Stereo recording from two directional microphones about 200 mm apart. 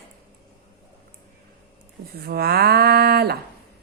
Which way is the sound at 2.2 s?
50° right (ahead or behind).